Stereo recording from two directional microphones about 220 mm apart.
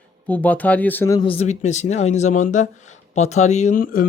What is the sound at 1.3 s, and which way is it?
Speech, 30° left (ahead or behind).